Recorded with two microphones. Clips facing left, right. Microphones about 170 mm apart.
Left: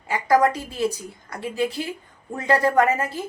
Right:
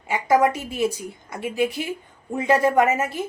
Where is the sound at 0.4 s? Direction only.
20° right (ahead or behind).